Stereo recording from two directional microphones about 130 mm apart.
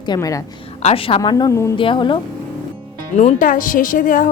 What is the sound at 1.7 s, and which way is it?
Speech, 40° left (ahead or behind).